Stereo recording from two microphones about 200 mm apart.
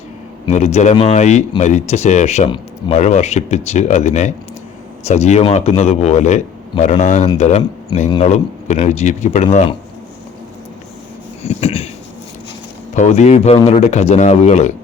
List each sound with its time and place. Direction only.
0.4 s speech: 35° left (ahead or behind)
11.4 s a sound: 30° left (ahead or behind)
12.9 s speech: 35° left (ahead or behind)